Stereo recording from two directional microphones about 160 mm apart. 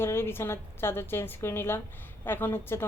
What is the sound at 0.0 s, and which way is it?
A woman's voice, 15° left (ahead or behind).